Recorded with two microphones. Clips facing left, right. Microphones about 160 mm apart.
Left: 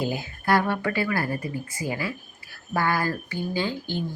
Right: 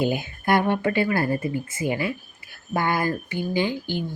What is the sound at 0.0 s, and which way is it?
A woman's voice, 20° right (ahead or behind).